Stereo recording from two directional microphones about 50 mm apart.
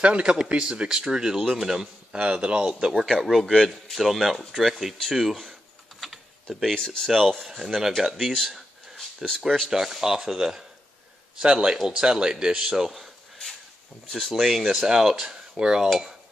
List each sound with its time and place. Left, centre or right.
0.0 s a man's voice: right
3.1 s speech: centre
5.1 s typing: centre
6.7 s speech: centre
7.1 s speech: centre
8.3 s speech: centre
9.2 s speech: centre